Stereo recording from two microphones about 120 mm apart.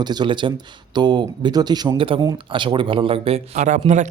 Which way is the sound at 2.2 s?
35° right (ahead or behind).